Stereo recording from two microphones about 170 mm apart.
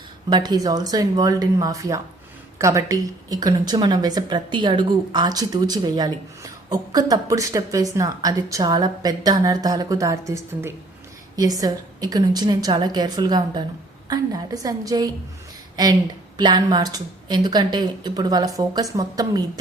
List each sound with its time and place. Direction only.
0.3 s a woman's voice: 25° right (ahead or behind)